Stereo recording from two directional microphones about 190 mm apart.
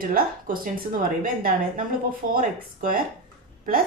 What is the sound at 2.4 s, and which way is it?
Speech, 45° right (ahead or behind).